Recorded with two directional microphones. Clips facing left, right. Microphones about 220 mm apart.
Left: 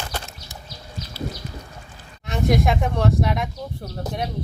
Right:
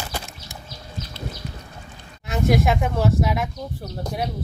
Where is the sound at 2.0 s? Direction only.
Centre (ahead or behind).